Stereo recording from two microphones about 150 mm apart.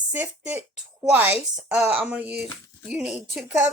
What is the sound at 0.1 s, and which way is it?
A woman's voice, 10° right (ahead or behind).